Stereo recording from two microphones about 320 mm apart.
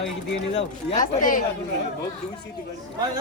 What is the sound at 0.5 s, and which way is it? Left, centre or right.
Speech, left.